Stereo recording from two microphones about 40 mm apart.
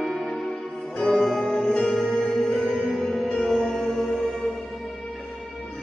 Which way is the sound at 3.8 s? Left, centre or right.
Centre.